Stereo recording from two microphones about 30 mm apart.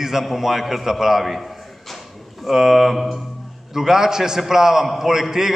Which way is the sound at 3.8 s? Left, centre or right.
Centre.